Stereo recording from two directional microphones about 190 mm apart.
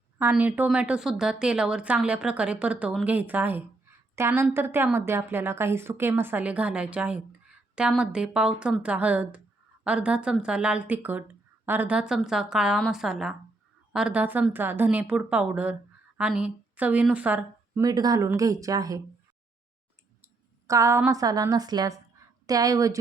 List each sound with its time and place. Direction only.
0.2 s a woman's voice: 10° right (ahead or behind)
17.8 s speech: 20° right (ahead or behind)
20.2 s a woman's voice: 15° right (ahead or behind)